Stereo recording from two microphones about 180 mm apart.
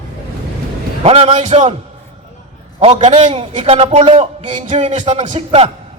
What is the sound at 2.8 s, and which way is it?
A man's voice, 35° right (ahead or behind).